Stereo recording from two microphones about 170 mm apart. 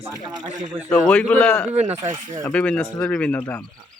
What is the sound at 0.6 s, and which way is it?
Speech, 50° right (ahead or behind).